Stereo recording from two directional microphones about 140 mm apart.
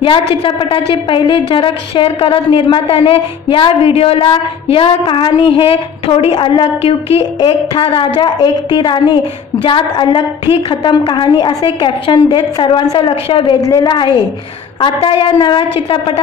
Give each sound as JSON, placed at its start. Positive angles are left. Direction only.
{"t": 0.4, "sound": "a woman's voice", "side_deg": 40}